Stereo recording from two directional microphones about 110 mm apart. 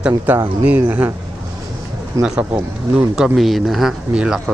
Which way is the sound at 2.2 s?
25° right (ahead or behind).